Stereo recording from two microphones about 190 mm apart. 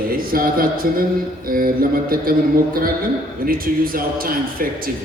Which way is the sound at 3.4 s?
50° right (ahead or behind).